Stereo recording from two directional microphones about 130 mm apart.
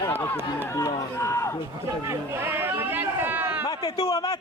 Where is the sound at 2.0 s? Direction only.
20° right (ahead or behind).